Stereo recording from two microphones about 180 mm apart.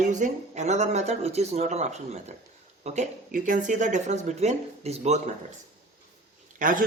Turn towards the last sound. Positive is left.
turn(degrees=-50)  # may be behind; listen again after turning